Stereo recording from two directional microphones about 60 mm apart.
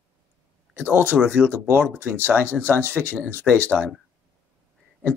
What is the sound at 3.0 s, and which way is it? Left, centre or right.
Speech, centre.